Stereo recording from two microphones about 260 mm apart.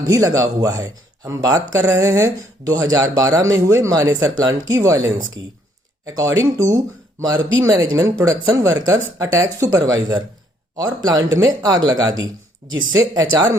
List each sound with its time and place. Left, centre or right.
0.0 s speech: centre
12.2 s speech: right
12.9 s speech: centre